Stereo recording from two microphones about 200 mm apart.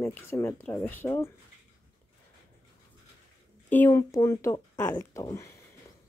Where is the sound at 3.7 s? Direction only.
10° left (ahead or behind).